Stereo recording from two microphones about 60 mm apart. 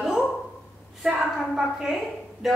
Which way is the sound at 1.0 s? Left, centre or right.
Centre.